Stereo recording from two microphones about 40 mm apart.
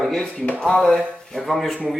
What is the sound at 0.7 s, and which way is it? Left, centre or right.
Speech, left.